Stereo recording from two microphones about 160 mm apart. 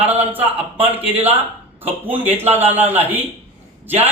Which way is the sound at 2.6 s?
10° right (ahead or behind).